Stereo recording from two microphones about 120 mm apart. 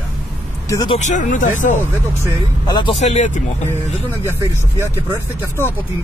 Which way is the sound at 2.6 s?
40° left (ahead or behind).